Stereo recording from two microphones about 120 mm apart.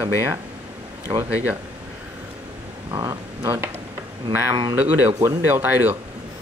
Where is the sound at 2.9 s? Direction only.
30° right (ahead or behind).